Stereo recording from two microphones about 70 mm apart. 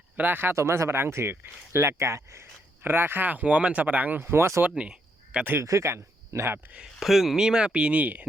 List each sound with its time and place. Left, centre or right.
0.2 s speech: right
0.5 s speech: right
4.3 s speech: right
4.7 s cricket: centre
5.6 s speech: right
6.7 s speech: centre; by 8.3 s right